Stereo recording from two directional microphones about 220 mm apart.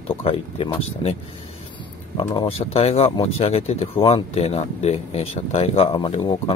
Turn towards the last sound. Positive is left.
turn(degrees=20)  # may be behind; listen again after turning